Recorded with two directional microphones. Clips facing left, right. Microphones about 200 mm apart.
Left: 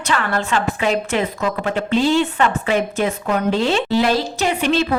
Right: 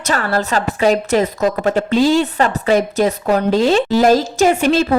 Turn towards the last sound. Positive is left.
turn(degrees=-45)  # may be behind; listen again after turning